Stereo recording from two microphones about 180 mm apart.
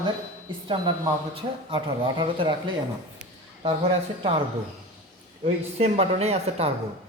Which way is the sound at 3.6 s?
30° right (ahead or behind).